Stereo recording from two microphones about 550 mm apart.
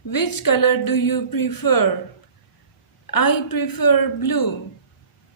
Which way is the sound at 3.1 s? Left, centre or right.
Left.